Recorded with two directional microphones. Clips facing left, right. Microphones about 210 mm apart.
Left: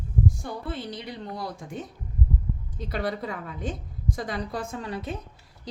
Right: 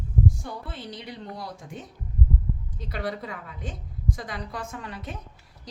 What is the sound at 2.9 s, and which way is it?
A woman's voice, 35° left (ahead or behind).